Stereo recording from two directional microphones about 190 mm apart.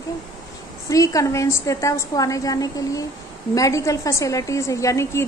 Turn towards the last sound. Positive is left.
turn(degrees=15)  # may be behind; listen again after turning